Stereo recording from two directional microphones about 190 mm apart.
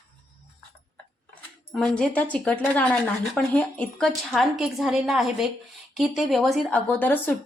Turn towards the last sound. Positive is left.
turn(degrees=10)  # may be behind; listen again after turning